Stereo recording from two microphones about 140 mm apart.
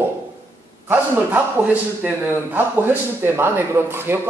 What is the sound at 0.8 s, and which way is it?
A man's voice, 15° right (ahead or behind).